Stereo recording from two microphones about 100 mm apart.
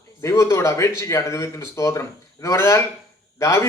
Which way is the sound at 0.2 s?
30° left (ahead or behind).